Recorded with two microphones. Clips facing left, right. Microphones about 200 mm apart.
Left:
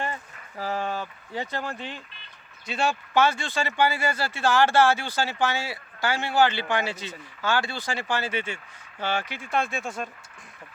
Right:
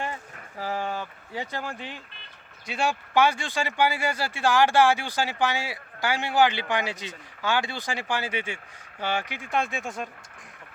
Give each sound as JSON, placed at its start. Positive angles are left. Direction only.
{"t": 0.6, "sound": "speech", "side_deg": -10}